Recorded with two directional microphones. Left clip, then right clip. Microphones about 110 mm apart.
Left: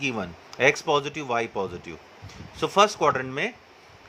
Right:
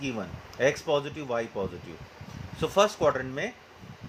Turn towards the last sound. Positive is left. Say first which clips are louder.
# left 3 dB
turn(degrees=50)  # may be behind; listen again after turning